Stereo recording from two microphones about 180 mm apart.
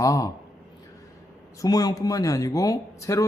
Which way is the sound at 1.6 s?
20° left (ahead or behind).